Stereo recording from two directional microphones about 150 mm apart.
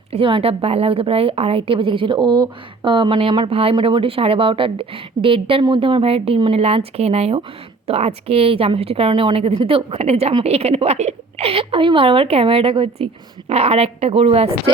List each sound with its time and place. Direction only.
0.1 s a woman's voice: 35° right (ahead or behind)